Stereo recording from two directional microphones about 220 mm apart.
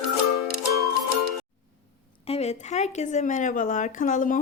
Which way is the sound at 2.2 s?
30° left (ahead or behind).